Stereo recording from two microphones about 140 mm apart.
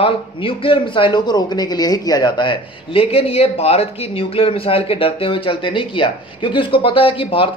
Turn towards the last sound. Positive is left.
turn(degrees=40)  # may be behind; listen again after turning